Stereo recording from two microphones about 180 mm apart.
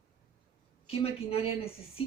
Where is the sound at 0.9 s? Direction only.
30° left (ahead or behind).